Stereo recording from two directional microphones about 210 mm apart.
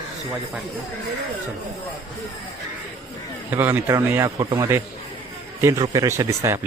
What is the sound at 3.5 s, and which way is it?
A man's voice, 10° right (ahead or behind).